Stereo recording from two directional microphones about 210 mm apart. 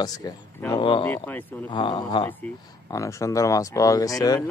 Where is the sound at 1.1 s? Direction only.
10° left (ahead or behind).